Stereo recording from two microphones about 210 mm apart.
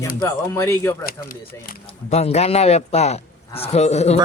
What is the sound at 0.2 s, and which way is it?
Speech, 15° left (ahead or behind).